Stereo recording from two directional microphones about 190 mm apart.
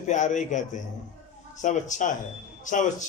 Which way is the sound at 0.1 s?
40° left (ahead or behind).